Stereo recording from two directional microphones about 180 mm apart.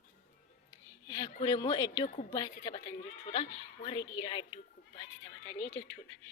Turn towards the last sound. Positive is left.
turn(degrees=10)  # may be behind; listen again after turning